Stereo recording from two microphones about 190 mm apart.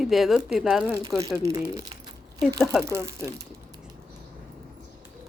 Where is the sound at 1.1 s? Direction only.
Centre (ahead or behind).